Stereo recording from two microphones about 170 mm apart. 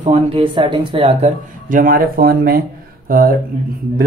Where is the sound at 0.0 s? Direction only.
30° right (ahead or behind).